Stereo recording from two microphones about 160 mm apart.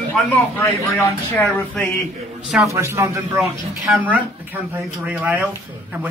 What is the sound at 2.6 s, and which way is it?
Speech, 15° right (ahead or behind).